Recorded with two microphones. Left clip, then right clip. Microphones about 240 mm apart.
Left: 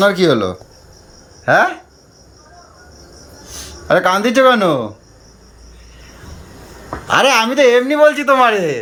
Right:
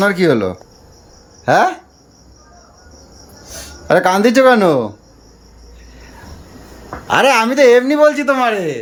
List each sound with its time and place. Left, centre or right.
0.0 s speech: centre
3.8 s speech: centre
7.1 s speech: centre